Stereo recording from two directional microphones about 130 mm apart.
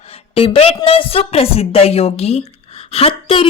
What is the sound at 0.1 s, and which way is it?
A woman's voice, 45° left (ahead or behind).